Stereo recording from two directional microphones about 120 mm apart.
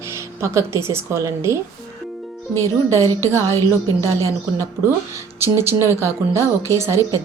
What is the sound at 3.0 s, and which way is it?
Speech, 25° right (ahead or behind).